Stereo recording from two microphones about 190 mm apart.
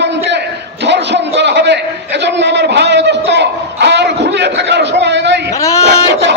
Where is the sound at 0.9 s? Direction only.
65° right (ahead or behind).